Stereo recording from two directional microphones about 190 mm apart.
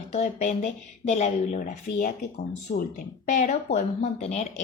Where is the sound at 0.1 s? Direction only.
35° left (ahead or behind).